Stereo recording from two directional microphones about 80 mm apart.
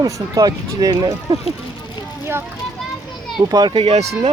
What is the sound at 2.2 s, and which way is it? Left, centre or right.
Speech, right.